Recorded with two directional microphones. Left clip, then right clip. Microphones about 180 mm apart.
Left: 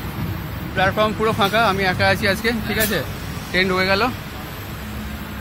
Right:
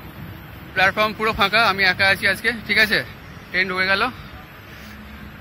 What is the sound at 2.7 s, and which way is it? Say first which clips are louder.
Speech: right 9 dB; 15° right (ahead or behind).